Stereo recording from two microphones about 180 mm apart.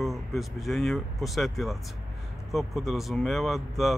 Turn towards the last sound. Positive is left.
turn(degrees=0)  # may be behind; listen again after turning